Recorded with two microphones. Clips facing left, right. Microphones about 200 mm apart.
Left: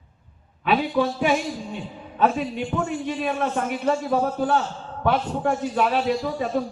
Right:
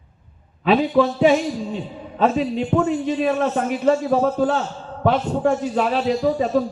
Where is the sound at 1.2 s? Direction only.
30° right (ahead or behind).